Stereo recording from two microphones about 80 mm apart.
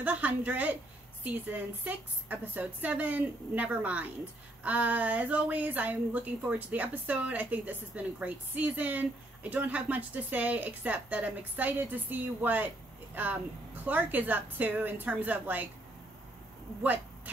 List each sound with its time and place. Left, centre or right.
0.0 s a woman's voice: centre